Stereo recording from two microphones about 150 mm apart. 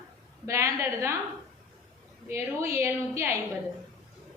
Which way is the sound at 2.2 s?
20° right (ahead or behind).